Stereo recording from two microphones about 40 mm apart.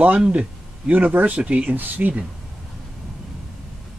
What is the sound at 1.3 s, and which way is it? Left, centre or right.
Speech, right.